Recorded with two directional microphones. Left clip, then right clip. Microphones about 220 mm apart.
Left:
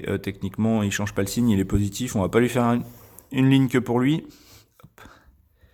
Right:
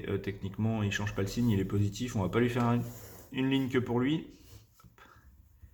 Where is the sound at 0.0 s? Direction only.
50° left (ahead or behind).